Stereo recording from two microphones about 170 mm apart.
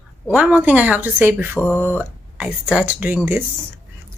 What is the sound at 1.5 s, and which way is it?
Speech, 10° left (ahead or behind).